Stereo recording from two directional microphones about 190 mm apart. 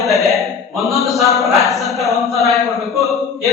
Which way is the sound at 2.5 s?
Centre (ahead or behind).